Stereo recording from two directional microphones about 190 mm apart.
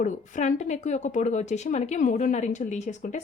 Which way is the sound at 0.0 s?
40° left (ahead or behind).